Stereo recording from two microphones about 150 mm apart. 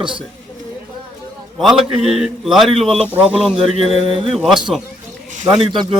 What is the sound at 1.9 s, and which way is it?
Speech, 45° right (ahead or behind).